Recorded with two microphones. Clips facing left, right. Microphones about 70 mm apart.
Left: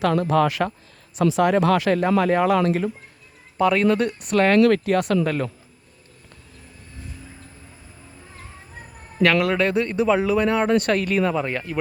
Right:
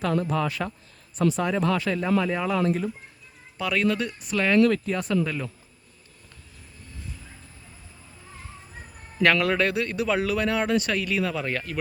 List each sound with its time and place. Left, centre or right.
0.0 s speech: left
3.6 s speech: left
4.6 s speech: left
9.2 s a man's voice: centre
9.6 s speech: left
10.8 s speech: left
11.4 s speech: centre